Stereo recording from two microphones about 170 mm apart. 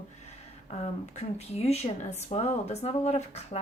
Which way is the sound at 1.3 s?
40° left (ahead or behind).